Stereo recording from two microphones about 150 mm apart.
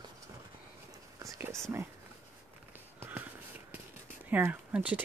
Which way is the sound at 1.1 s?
20° right (ahead or behind).